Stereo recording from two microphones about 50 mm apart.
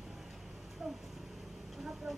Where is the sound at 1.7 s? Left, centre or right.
Centre.